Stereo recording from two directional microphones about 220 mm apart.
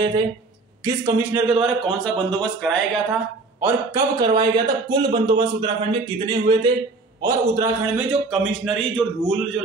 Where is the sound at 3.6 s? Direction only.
15° right (ahead or behind).